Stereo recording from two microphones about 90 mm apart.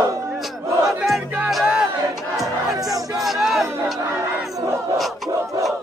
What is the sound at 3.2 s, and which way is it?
Battle cry, centre (ahead or behind).